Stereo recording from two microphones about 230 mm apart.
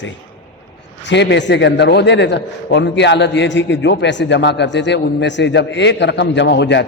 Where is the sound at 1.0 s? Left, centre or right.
Left.